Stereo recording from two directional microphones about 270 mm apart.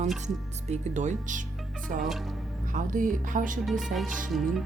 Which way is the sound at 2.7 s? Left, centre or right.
Right.